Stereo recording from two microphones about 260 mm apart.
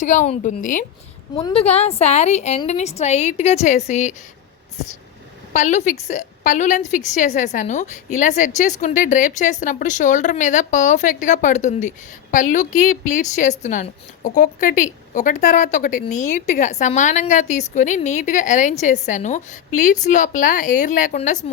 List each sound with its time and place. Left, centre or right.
0.0 s a woman's voice: left
1.4 s a woman's voice: centre
5.5 s a woman's voice: left